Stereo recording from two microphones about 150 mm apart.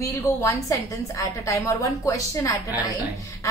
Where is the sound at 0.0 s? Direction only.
20° left (ahead or behind).